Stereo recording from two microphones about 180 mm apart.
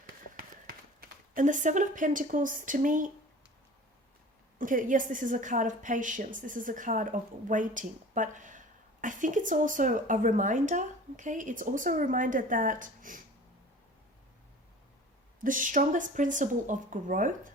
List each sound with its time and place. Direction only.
0.3 s speech: 50° right (ahead or behind)
4.5 s a woman's voice: 50° right (ahead or behind)
15.4 s a woman's voice: 45° right (ahead or behind)